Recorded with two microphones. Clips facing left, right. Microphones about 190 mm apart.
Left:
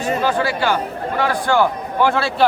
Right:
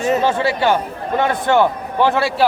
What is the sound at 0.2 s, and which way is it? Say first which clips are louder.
A man's voice: right 2 dB; 25° right (ahead or behind).